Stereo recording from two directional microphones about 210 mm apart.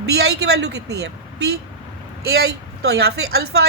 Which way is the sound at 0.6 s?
55° right (ahead or behind).